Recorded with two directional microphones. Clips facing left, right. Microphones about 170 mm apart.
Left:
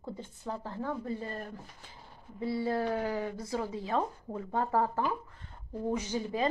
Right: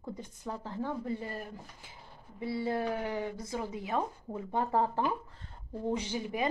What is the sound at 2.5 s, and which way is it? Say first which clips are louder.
Speech: left 1 dB; 20° right (ahead or behind).